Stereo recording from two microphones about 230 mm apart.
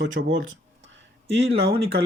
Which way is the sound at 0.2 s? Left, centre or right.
Right.